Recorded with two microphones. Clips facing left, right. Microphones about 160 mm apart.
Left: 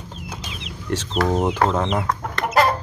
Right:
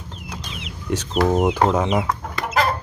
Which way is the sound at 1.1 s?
15° right (ahead or behind).